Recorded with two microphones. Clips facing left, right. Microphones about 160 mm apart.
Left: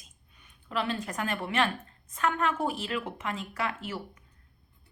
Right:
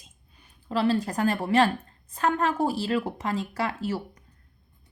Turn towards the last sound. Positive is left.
turn(degrees=-40)  # may be behind; listen again after turning